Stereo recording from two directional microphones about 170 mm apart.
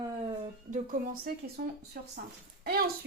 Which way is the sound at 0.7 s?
55° right (ahead or behind).